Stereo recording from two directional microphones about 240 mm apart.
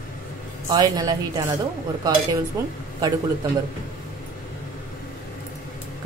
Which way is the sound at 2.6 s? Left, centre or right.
Centre.